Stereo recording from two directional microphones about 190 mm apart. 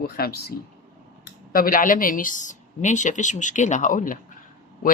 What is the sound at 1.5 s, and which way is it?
Speech, 50° left (ahead or behind).